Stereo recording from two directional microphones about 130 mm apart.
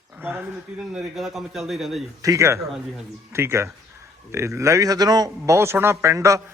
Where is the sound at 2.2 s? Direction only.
25° right (ahead or behind).